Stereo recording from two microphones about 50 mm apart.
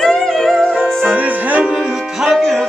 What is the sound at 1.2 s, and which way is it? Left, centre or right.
Music, right.